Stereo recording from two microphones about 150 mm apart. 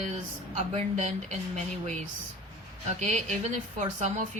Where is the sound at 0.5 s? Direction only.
50° right (ahead or behind).